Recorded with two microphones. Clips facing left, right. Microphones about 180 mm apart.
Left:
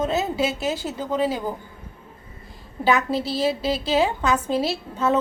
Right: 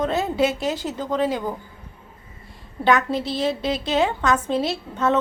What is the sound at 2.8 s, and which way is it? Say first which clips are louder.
A woman's voice: right 1 dB; 5° left (ahead or behind).